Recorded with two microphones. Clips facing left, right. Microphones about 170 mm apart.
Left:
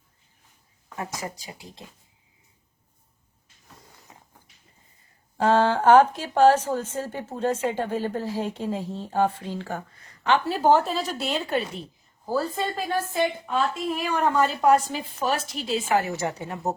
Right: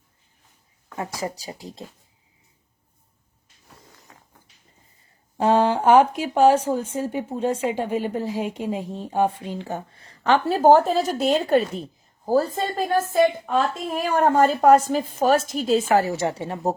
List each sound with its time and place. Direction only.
0.9 s speech: 35° right (ahead or behind)
4.1 s dog: 20° left (ahead or behind)
5.4 s a woman's voice: 15° right (ahead or behind); by 16.7 s 30° right (ahead or behind)